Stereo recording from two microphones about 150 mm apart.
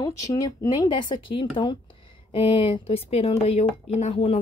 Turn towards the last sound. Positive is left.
turn(degrees=40)  # may be behind; listen again after turning